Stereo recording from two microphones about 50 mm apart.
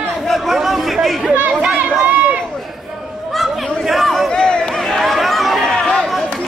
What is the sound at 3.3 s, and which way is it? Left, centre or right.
Chatter, centre.